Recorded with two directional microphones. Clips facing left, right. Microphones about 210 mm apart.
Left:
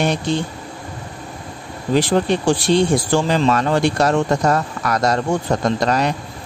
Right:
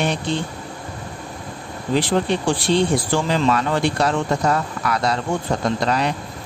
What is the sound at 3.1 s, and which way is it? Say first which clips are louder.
Speech: left 3 dB; 45° left (ahead or behind).